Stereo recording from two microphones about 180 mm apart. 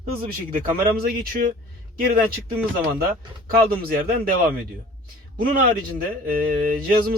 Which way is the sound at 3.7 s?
50° right (ahead or behind).